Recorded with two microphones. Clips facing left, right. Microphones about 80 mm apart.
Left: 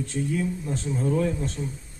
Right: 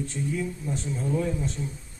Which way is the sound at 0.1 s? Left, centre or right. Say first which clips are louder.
Left 3 dB; left.